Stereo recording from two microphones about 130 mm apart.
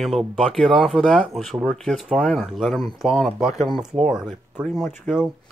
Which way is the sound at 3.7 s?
45° right (ahead or behind).